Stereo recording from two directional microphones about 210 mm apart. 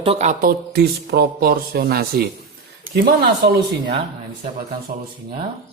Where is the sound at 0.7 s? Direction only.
50° right (ahead or behind).